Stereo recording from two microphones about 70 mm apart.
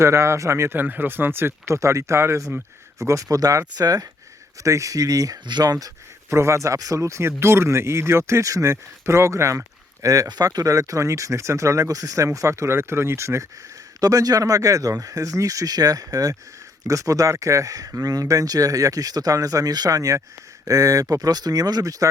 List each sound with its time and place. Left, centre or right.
0.0 s speech: right
0.8 s speech: right
4.6 s speech: right
6.3 s speech: right
14.0 s speech: right